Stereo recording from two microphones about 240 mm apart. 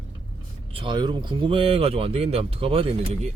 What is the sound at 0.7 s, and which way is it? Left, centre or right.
Speech, right.